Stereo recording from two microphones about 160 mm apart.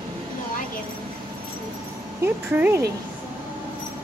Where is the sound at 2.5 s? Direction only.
15° right (ahead or behind).